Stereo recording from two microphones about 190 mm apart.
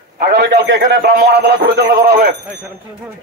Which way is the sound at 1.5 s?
50° right (ahead or behind).